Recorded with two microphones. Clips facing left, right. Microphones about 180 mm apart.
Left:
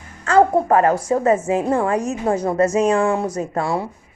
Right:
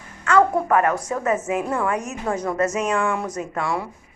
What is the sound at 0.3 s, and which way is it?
A woman's voice, 30° left (ahead or behind).